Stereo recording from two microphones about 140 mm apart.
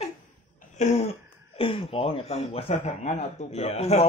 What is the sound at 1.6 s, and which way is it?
Speech, 40° left (ahead or behind).